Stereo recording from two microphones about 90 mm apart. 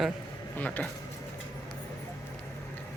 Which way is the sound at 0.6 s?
15° left (ahead or behind).